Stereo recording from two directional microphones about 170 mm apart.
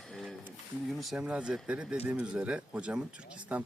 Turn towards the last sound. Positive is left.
turn(degrees=-10)  # may be behind; listen again after turning